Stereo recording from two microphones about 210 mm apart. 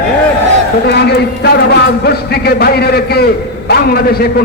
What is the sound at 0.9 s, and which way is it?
A man's voice, 55° left (ahead or behind).